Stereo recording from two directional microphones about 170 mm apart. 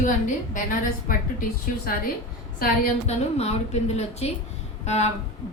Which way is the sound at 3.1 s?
40° left (ahead or behind).